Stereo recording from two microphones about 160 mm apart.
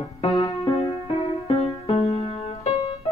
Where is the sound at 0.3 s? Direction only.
25° left (ahead or behind).